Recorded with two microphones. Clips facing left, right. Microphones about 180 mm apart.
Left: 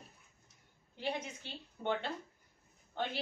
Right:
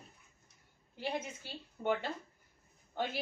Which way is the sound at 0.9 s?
10° right (ahead or behind).